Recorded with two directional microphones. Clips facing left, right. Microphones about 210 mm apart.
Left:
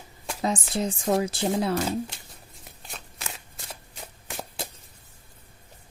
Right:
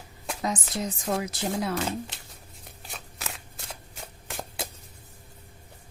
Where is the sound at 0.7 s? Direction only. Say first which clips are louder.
Left 4 dB; 30° left (ahead or behind).